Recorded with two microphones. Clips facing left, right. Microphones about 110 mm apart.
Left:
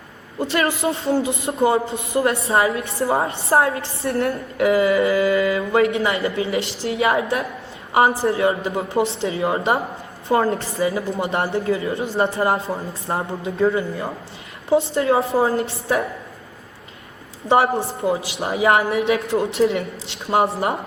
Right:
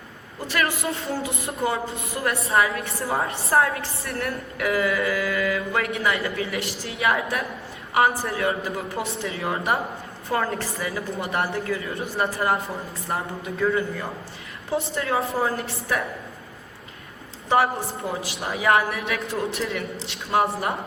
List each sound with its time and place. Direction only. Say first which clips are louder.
0.3 s a woman's voice: left 5 dB; 25° left (ahead or behind)
17.5 s a woman's voice: left 4 dB; 20° left (ahead or behind)